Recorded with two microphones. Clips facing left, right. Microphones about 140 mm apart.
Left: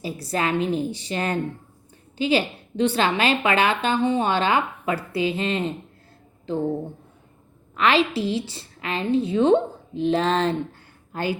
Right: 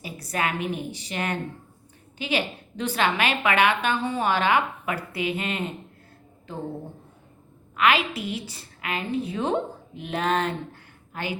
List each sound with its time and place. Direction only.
0.0 s a woman's voice: 30° left (ahead or behind)
7.8 s a woman's voice: 30° left (ahead or behind)